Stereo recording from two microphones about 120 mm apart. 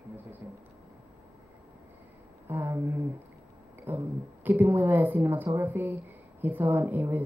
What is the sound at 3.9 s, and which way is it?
A woman's voice, 15° right (ahead or behind).